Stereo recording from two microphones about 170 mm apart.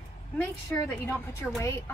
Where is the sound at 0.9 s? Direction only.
10° left (ahead or behind).